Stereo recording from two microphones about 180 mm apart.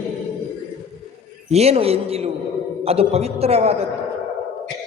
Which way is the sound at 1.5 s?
35° right (ahead or behind).